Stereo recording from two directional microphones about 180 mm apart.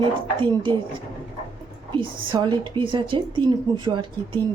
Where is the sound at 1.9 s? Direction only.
25° right (ahead or behind).